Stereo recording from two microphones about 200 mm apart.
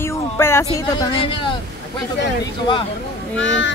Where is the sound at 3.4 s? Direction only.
70° left (ahead or behind).